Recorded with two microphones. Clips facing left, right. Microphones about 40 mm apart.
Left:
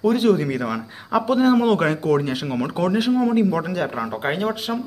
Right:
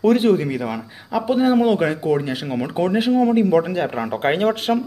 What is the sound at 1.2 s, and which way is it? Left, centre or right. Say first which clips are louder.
A man's voice: right 1 dB; centre.